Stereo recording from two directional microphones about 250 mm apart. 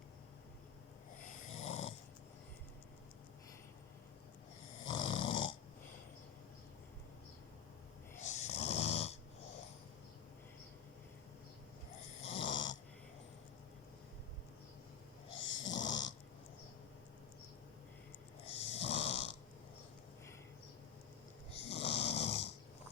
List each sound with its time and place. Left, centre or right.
1.4 s snoring: left
4.9 s snoring: centre
8.2 s snoring: left
12.2 s snoring: left
15.4 s snoring: left
15.7 s snoring: centre
18.5 s snoring: left
21.7 s snoring: left